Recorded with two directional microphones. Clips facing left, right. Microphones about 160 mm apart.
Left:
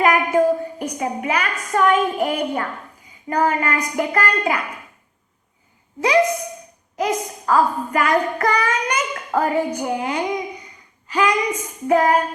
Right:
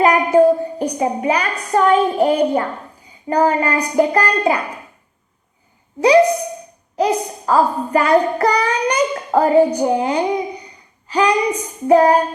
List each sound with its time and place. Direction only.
0.0 s a woman's voice: 30° right (ahead or behind)
6.0 s a child's voice: 35° right (ahead or behind)